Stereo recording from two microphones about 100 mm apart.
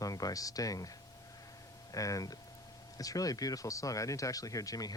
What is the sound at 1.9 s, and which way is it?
Speech, 35° left (ahead or behind).